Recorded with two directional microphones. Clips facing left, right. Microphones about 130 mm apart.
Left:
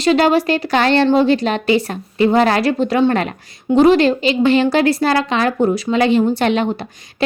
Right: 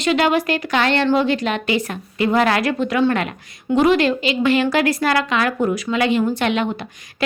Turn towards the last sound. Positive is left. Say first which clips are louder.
# left 4 dB
turn(degrees=35)  # may be behind; listen again after turning